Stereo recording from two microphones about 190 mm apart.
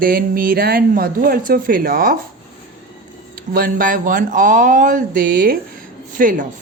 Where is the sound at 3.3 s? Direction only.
50° right (ahead or behind).